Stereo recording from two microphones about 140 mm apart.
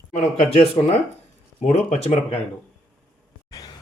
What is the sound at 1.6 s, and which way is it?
Speech, 50° left (ahead or behind).